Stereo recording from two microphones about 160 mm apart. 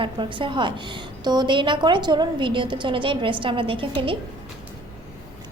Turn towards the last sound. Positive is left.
turn(degrees=-30)  # may be behind; listen again after turning